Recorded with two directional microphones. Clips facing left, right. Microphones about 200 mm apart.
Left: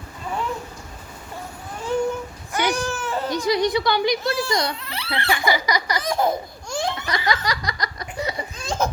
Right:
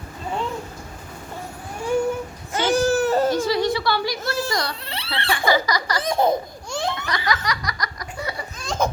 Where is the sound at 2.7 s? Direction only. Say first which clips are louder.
Right 7 dB; 40° right (ahead or behind).